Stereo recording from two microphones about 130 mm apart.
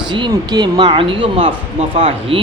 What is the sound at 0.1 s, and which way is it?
A man's voice, 35° right (ahead or behind).